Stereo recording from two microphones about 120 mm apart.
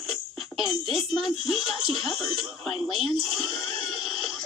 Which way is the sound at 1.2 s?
Centre (ahead or behind).